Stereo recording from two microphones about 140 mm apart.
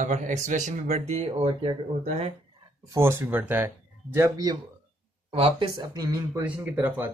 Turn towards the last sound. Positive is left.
turn(degrees=-15)  # may be behind; listen again after turning